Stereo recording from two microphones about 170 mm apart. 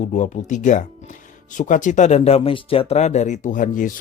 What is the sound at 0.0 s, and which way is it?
Speech, 45° left (ahead or behind).